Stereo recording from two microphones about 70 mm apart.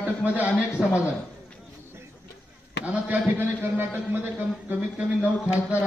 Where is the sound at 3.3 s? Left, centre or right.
Right.